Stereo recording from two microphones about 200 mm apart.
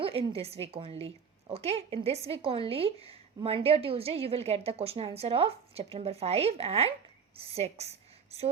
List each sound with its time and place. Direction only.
0.0 s a woman's voice: 30° right (ahead or behind)